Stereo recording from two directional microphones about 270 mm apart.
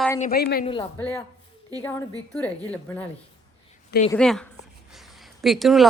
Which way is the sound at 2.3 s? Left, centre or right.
Centre.